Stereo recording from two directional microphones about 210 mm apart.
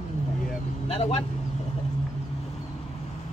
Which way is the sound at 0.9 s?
25° left (ahead or behind).